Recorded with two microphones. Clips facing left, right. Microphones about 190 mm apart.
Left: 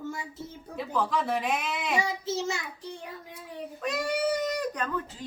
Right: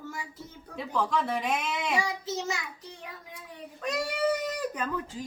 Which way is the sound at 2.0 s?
25° left (ahead or behind).